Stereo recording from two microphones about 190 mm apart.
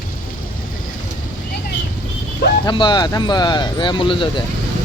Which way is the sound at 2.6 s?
25° left (ahead or behind).